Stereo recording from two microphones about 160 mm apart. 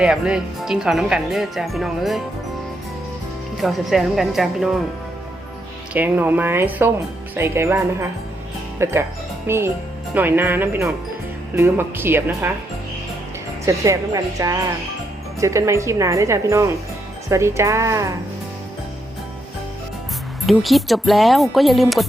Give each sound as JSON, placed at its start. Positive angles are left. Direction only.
{"t": 0.0, "sound": "speech", "side_deg": -5}
{"t": 3.6, "sound": "speech", "side_deg": 0}
{"t": 5.9, "sound": "speech", "side_deg": -10}
{"t": 13.7, "sound": "speech", "side_deg": -20}
{"t": 20.5, "sound": "speech", "side_deg": 0}